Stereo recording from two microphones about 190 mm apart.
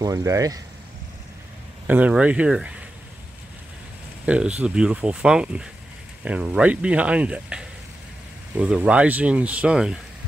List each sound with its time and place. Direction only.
0.0 s speech: 15° right (ahead or behind)
1.9 s speech: 10° right (ahead or behind)
4.3 s speech: 5° right (ahead or behind)